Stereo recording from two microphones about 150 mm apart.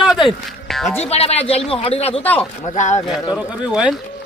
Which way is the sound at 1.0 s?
45° left (ahead or behind).